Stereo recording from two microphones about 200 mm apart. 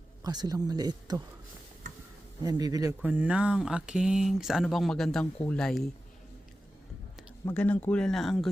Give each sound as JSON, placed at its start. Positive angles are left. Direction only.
{"t": 0.2, "sound": "speech", "side_deg": -20}
{"t": 2.4, "sound": "speech", "side_deg": -20}
{"t": 3.0, "sound": "speech", "side_deg": -5}
{"t": 7.4, "sound": "speech", "side_deg": 10}